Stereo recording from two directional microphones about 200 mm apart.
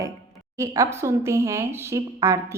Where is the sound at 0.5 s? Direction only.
15° right (ahead or behind).